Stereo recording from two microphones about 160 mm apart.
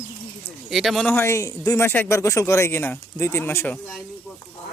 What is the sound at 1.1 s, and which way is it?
Speech, 15° left (ahead or behind).